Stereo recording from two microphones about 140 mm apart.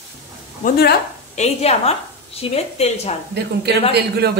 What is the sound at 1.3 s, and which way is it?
A woman's voice, 50° left (ahead or behind).